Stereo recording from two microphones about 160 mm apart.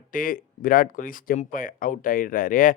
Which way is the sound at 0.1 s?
60° left (ahead or behind).